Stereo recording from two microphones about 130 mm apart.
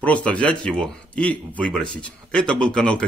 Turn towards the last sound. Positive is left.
turn(degrees=10)  # may be behind; listen again after turning